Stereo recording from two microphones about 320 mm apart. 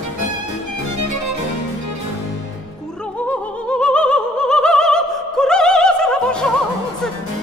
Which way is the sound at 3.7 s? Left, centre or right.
Centre.